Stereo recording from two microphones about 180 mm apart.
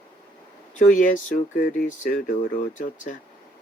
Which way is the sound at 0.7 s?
45° left (ahead or behind).